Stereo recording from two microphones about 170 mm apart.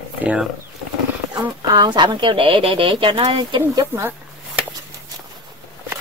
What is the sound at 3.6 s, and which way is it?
Speech, 15° right (ahead or behind).